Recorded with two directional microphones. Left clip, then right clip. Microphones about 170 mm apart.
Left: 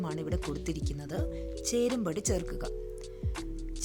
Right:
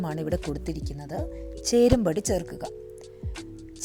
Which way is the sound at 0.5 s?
15° right (ahead or behind).